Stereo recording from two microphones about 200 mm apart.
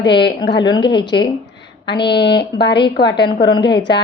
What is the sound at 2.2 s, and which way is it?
Speech, 55° left (ahead or behind).